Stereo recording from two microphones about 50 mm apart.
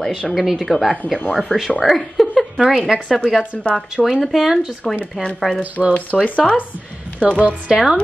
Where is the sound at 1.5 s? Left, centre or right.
Centre.